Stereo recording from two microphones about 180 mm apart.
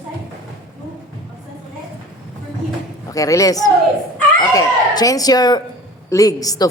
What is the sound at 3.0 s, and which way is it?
A woman's voice, 20° left (ahead or behind).